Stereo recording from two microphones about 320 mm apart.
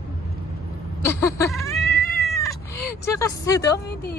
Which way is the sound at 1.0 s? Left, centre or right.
Centre.